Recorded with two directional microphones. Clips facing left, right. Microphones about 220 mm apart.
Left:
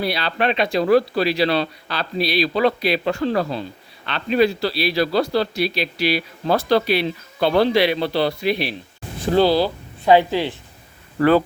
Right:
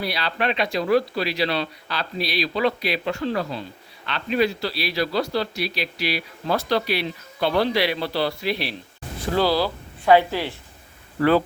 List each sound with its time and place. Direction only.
0.0 s a man's voice: 30° left (ahead or behind)
11.2 s speech: 45° left (ahead or behind)